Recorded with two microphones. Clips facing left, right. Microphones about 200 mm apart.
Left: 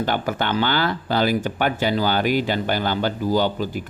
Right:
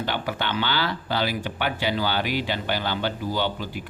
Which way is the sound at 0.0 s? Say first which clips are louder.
Left 5 dB; 45° left (ahead or behind).